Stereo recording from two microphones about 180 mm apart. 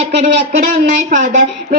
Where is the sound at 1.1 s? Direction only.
45° right (ahead or behind).